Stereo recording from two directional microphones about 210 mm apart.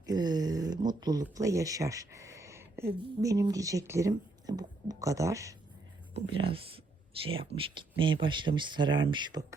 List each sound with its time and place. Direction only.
0.0 s speech: 20° right (ahead or behind)
6.1 s speech: 25° right (ahead or behind)